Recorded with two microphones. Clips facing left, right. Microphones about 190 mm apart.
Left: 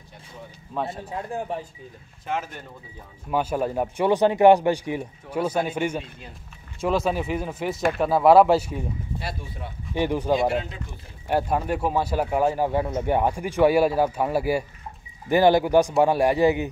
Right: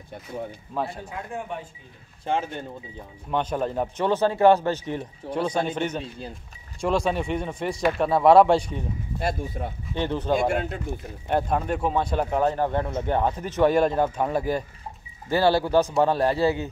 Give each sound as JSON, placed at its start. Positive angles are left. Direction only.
{"t": 0.7, "sound": "speech", "side_deg": 0}
{"t": 1.1, "sound": "speech", "side_deg": 35}
{"t": 2.2, "sound": "speech", "side_deg": -30}
{"t": 3.3, "sound": "speech", "side_deg": 5}
{"t": 9.2, "sound": "speech", "side_deg": -45}
{"t": 9.9, "sound": "speech", "side_deg": 10}
{"t": 10.5, "sound": "speech", "side_deg": -50}
{"t": 11.2, "sound": "speech", "side_deg": 5}